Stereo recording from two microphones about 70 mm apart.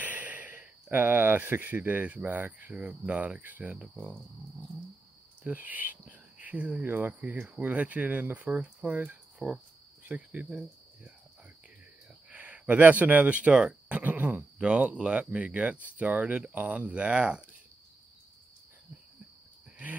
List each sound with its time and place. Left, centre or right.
0.0 s speech: right
5.4 s cricket: right
6.8 s speech: right
9.4 s speech: centre
10.0 s cricket: right
12.3 s speech: right